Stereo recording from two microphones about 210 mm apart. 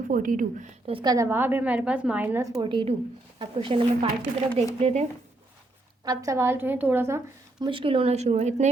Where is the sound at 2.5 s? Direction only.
25° right (ahead or behind).